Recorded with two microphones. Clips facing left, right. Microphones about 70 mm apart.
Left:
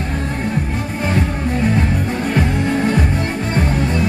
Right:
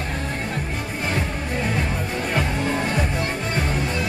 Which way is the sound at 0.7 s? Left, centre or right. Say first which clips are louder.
Left 6 dB; left.